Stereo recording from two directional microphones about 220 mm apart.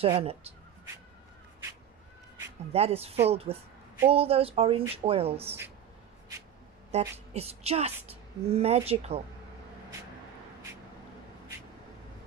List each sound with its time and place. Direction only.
0.0 s speech: 25° right (ahead or behind)
2.7 s speech: 30° right (ahead or behind)
6.9 s speech: 30° right (ahead or behind)